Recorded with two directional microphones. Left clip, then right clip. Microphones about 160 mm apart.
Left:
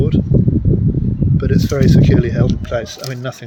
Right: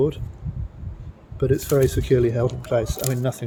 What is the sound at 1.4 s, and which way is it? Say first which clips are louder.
Speech: even; 20° right (ahead or behind).